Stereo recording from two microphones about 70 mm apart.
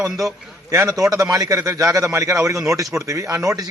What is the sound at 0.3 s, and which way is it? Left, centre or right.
A man's voice, right.